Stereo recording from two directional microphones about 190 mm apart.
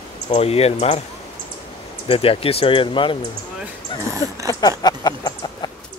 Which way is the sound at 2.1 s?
30° left (ahead or behind).